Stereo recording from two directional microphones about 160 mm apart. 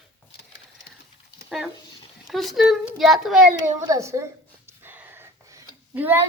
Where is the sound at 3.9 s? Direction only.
20° right (ahead or behind).